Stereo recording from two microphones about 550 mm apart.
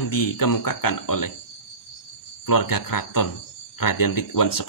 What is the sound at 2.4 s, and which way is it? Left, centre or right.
Speech, left.